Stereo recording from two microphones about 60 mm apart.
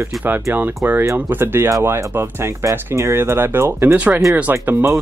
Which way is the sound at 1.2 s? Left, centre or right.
Right.